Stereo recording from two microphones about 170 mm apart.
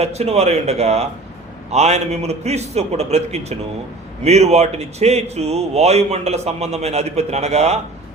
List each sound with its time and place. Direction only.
0.0 s speech: 40° right (ahead or behind)